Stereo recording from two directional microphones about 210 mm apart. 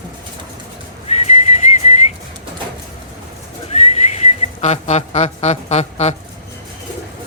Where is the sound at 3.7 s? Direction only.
30° left (ahead or behind).